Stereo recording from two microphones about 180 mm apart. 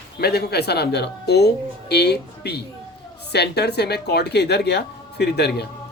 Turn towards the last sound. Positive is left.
turn(degrees=65)  # may be behind; listen again after turning